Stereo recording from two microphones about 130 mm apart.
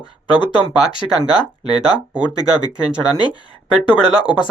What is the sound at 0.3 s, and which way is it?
Speech, 35° left (ahead or behind).